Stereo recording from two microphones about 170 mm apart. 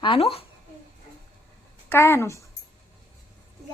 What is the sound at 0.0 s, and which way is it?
Speech, 30° left (ahead or behind).